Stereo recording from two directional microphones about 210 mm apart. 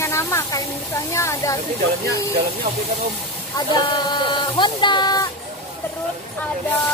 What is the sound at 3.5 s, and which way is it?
Speech, 20° left (ahead or behind).